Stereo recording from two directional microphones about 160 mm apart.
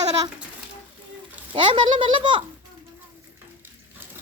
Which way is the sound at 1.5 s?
30° right (ahead or behind).